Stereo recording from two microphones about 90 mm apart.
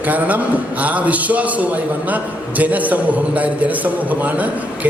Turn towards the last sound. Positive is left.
turn(degrees=-15)  # may be behind; listen again after turning